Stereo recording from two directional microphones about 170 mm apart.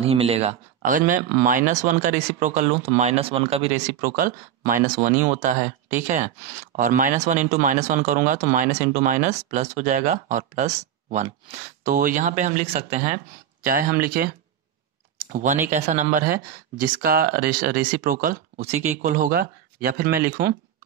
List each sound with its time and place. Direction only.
0.0 s speech: 35° right (ahead or behind)
4.0 s speech: 55° right (ahead or behind)
6.8 s speech: 50° right (ahead or behind)
11.8 s speech: 55° right (ahead or behind)
13.7 s speech: 60° right (ahead or behind)
15.1 s a sound: 50° right (ahead or behind)
15.7 s speech: 45° right (ahead or behind)
18.6 s speech: 40° right (ahead or behind); by 20.5 s 60° right (ahead or behind)